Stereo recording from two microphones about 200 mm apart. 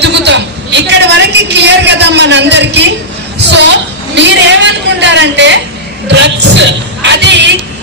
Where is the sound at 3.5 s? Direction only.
60° right (ahead or behind).